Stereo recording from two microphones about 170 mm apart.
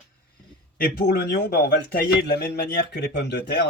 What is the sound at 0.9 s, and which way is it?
Speech, 70° left (ahead or behind).